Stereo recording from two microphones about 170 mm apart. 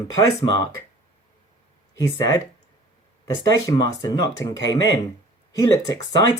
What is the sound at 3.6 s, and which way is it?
Speech, 20° left (ahead or behind).